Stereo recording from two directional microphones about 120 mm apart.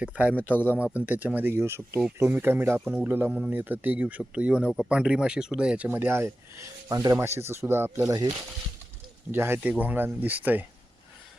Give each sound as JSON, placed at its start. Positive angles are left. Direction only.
{"t": 0.0, "sound": "speech", "side_deg": -10}
{"t": 0.5, "sound": "speech", "side_deg": 15}
{"t": 0.9, "sound": "speech", "side_deg": -15}
{"t": 9.3, "sound": "speech", "side_deg": -20}